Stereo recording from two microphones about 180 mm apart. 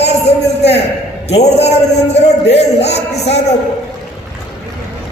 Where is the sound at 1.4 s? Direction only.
35° left (ahead or behind).